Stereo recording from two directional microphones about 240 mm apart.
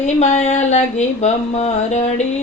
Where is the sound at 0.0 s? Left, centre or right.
Left.